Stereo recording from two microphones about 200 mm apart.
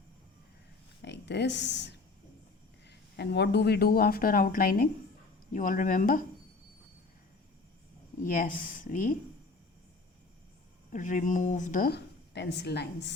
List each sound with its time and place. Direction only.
1.0 s a woman's voice: 60° left (ahead or behind); by 6.2 s 40° left (ahead or behind)
8.3 s a woman's voice: 45° left (ahead or behind)
10.9 s a woman's voice: 40° left (ahead or behind); by 13.1 s 55° left (ahead or behind)